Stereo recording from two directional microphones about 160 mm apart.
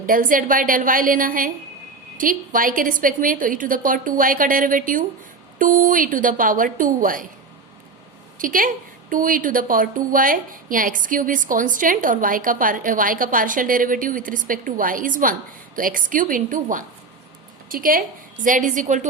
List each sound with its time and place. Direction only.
0.0 s a woman's voice: 60° right (ahead or behind)
8.4 s a woman's voice: 60° right (ahead or behind)